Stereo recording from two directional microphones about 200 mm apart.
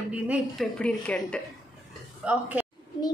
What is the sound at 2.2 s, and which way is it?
Speech, 5° right (ahead or behind).